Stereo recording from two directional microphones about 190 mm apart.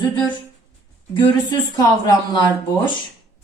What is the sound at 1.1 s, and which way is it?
A woman's voice, 20° left (ahead or behind).